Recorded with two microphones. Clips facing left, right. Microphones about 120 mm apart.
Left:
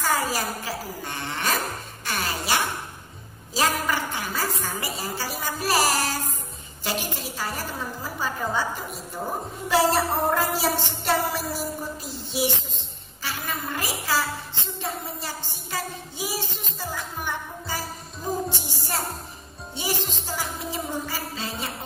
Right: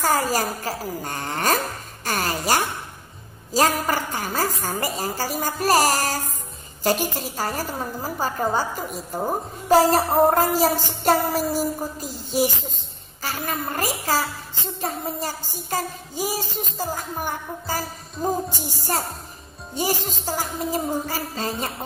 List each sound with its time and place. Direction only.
0.0 s a woman's voice: 40° right (ahead or behind)
2.0 s music: 40° right (ahead or behind)
3.5 s a woman's voice: 40° right (ahead or behind)
13.2 s music: 40° right (ahead or behind)
19.7 s a woman's voice: 40° right (ahead or behind)